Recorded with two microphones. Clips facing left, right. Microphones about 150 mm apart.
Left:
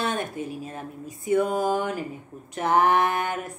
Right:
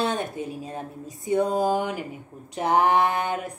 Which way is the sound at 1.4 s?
30° right (ahead or behind).